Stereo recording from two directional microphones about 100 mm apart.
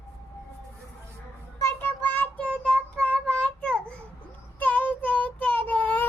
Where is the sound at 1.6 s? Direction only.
25° left (ahead or behind).